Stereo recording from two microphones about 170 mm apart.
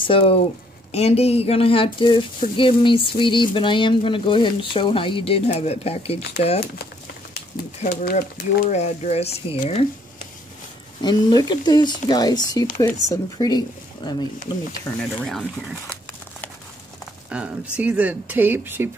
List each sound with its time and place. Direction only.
0.0 s speech: 35° left (ahead or behind)
7.5 s speech: 60° left (ahead or behind); by 9.8 s 35° left (ahead or behind)
11.0 s speech: 25° left (ahead or behind)
15.0 s speech: centre (ahead or behind)
17.3 s speech: 5° right (ahead or behind)